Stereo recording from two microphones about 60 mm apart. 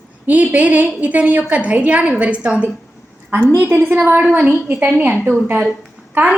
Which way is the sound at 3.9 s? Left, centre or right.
Right.